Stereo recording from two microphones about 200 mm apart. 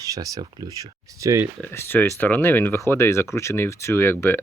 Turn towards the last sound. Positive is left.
turn(degrees=10)  # may be behind; listen again after turning